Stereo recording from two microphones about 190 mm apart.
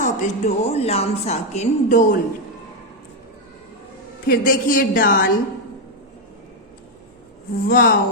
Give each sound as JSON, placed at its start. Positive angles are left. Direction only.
{"t": 0.0, "sound": "a woman's voice", "side_deg": 40}
{"t": 4.3, "sound": "a woman's voice", "side_deg": 50}
{"t": 7.7, "sound": "a woman's voice", "side_deg": 50}